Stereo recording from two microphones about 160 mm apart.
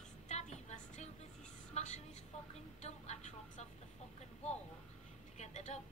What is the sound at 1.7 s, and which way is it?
Vehicle, 45° left (ahead or behind).